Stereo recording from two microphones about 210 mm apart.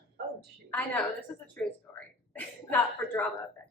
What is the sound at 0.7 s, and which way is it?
A woman's voice, 5° left (ahead or behind).